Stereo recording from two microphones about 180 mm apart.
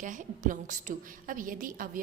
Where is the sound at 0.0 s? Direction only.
45° right (ahead or behind).